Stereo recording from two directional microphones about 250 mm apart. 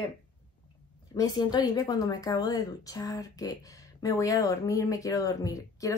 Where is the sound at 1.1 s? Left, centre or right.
Centre.